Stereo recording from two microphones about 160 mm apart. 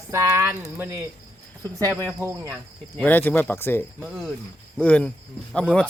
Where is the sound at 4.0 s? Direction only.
Centre (ahead or behind).